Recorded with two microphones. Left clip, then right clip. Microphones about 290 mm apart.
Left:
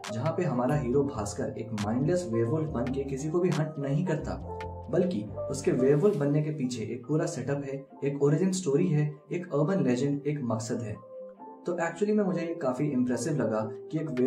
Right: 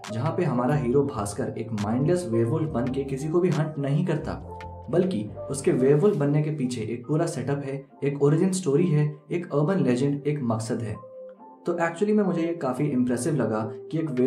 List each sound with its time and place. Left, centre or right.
0.1 s speech: centre